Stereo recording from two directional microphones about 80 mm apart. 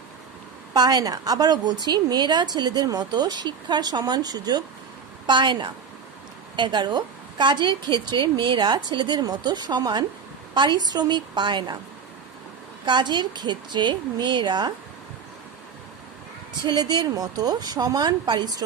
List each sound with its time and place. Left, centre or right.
0.7 s a woman's voice: right
5.2 s a woman's voice: right
12.8 s a woman's voice: right
16.6 s a woman's voice: right